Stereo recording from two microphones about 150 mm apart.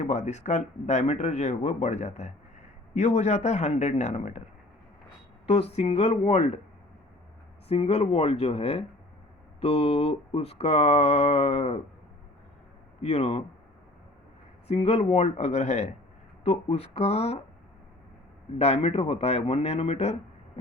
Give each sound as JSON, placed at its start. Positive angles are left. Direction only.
{"t": 0.0, "sound": "mantra", "side_deg": 50}
{"t": 5.5, "sound": "mantra", "side_deg": 45}
{"t": 7.7, "sound": "speech", "side_deg": 40}
{"t": 9.6, "sound": "mantra", "side_deg": 40}
{"t": 13.0, "sound": "mantra", "side_deg": 45}
{"t": 14.7, "sound": "mantra", "side_deg": 45}
{"t": 16.4, "sound": "speech", "side_deg": 40}
{"t": 18.6, "sound": "mantra", "side_deg": 45}